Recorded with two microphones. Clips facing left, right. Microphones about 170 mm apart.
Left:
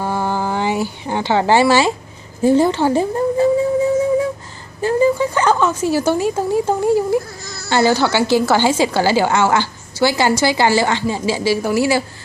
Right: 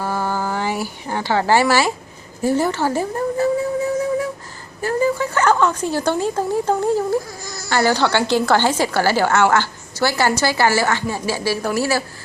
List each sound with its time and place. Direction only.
0.0 s a sound: 20° left (ahead or behind)
2.4 s speech: 20° left (ahead or behind)
4.8 s a woman's voice: 20° left (ahead or behind)
7.4 s insect: 15° right (ahead or behind)
7.7 s a woman's voice: 15° left (ahead or behind)